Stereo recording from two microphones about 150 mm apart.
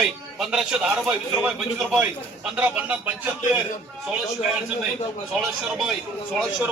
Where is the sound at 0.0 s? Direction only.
Centre (ahead or behind).